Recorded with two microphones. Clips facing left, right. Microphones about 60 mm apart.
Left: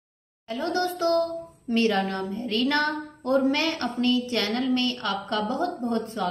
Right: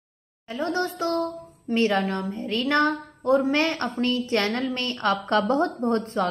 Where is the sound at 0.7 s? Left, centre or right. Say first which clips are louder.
Left 2 dB; right.